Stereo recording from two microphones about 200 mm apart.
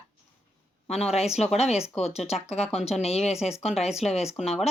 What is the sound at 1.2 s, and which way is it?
Speech, 30° left (ahead or behind).